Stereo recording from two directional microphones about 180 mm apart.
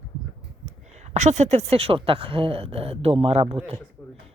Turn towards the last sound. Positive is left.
turn(degrees=-30)  # may be behind; listen again after turning